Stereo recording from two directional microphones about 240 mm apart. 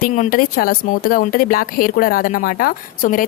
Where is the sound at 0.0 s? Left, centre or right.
Left.